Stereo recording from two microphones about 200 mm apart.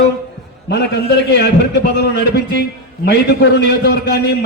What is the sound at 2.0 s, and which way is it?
Speech, 55° left (ahead or behind).